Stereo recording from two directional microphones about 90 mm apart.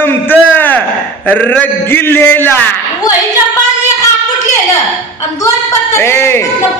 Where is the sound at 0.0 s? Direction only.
20° left (ahead or behind).